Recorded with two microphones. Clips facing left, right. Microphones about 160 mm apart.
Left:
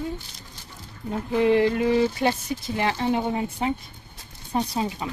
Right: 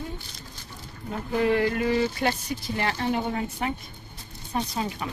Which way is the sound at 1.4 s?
25° left (ahead or behind).